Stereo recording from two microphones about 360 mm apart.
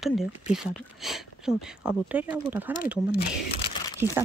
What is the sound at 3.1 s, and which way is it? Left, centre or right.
Speech, left.